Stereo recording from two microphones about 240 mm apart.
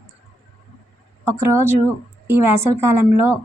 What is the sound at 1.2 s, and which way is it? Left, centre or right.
A woman's voice, centre.